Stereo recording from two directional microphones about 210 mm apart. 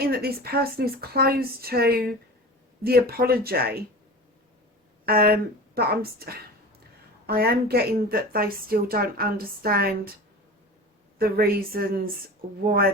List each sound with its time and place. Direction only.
0.0 s a woman's voice: 45° right (ahead or behind)
5.0 s a woman's voice: 45° right (ahead or behind)
11.2 s a woman's voice: 45° right (ahead or behind)